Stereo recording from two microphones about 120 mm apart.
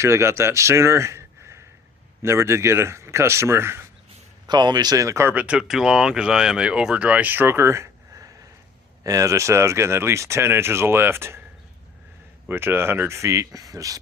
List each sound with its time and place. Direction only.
0.0 s a man's voice: 20° right (ahead or behind)
4.4 s speech: 35° right (ahead or behind)
5.3 s speech: 10° right (ahead or behind)
12.5 s speech: 20° right (ahead or behind)